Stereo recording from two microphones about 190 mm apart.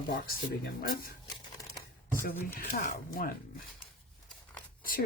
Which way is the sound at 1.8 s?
10° left (ahead or behind).